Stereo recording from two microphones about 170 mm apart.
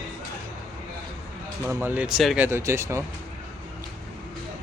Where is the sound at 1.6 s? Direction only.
15° right (ahead or behind).